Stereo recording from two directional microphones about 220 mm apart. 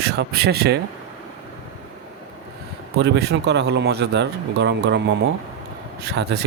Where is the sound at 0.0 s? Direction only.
45° right (ahead or behind).